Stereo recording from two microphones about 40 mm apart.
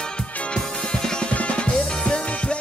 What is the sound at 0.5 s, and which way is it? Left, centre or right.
Music, centre.